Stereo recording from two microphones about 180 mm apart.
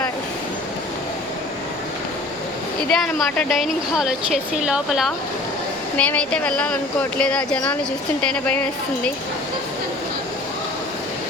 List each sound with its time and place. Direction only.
2.9 s a woman's voice: centre (ahead or behind)